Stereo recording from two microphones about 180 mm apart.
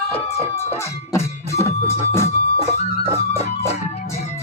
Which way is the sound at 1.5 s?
15° left (ahead or behind).